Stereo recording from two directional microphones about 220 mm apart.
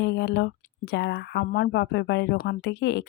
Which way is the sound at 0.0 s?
50° left (ahead or behind).